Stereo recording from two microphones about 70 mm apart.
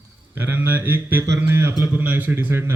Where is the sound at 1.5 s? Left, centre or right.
Right.